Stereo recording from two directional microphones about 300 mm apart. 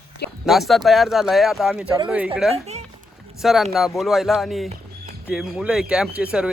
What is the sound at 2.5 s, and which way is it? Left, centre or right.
Speech, right.